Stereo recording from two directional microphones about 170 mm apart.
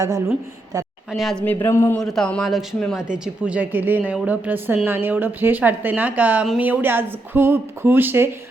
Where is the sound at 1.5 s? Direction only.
15° left (ahead or behind).